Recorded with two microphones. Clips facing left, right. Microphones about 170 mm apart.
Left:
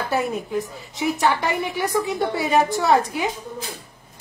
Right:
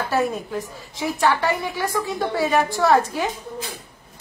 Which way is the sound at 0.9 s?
15° left (ahead or behind).